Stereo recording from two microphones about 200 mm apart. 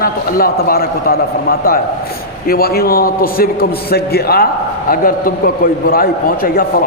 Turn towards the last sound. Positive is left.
turn(degrees=45)  # may be behind; listen again after turning